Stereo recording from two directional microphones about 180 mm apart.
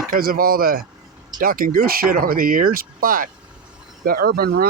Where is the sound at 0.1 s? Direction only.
55° right (ahead or behind).